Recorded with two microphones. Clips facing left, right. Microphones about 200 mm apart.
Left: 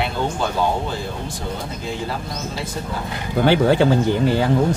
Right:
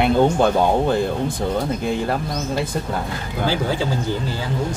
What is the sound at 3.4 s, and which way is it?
Speech, 65° left (ahead or behind).